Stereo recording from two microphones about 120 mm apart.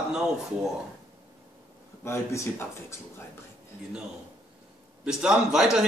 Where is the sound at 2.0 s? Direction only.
20° left (ahead or behind).